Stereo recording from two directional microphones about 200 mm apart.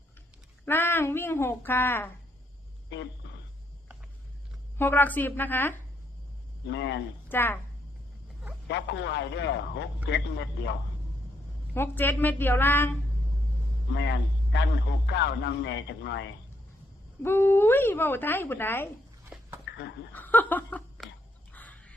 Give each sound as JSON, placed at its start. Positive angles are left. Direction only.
{"t": 0.6, "sound": "speech", "side_deg": 10}
{"t": 2.9, "sound": "a sound", "side_deg": 60}
{"t": 4.8, "sound": "speech", "side_deg": 10}
{"t": 6.7, "sound": "a man's voice", "side_deg": 60}
{"t": 7.3, "sound": "speech", "side_deg": 10}
{"t": 8.6, "sound": "a man's voice", "side_deg": 60}
{"t": 11.7, "sound": "speech", "side_deg": 10}
{"t": 13.9, "sound": "a man's voice", "side_deg": 60}
{"t": 17.2, "sound": "speech", "side_deg": 10}
{"t": 19.6, "sound": "speech", "side_deg": 60}
{"t": 20.1, "sound": "laughter", "side_deg": 10}
{"t": 21.5, "sound": "bird", "side_deg": 10}